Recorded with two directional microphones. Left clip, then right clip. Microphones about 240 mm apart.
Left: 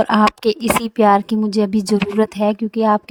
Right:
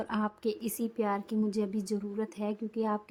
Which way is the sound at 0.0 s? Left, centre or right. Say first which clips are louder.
Left 19 dB; left.